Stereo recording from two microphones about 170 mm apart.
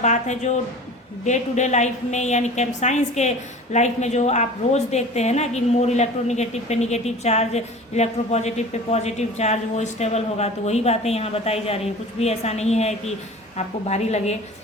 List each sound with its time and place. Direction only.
0.0 s a woman's voice: 45° left (ahead or behind)